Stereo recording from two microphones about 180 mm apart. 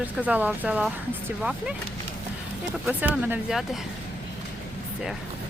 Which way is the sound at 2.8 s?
10° right (ahead or behind).